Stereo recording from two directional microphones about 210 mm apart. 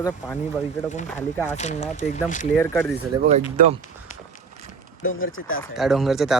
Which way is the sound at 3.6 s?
40° right (ahead or behind).